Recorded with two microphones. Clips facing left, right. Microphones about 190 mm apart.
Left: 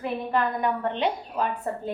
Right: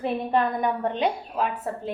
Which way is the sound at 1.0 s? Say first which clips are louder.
Right 1 dB; 5° right (ahead or behind).